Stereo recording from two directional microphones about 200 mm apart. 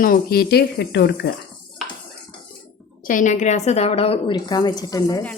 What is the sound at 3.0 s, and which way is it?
A woman's voice, 40° left (ahead or behind).